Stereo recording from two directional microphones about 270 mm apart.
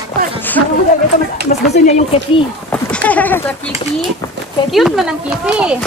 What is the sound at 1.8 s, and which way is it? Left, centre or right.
Speech, left.